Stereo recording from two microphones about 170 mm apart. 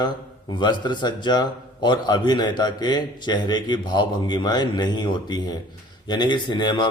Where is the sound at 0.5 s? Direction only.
25° left (ahead or behind).